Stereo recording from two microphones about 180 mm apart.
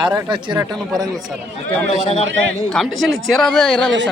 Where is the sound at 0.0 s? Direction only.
25° right (ahead or behind).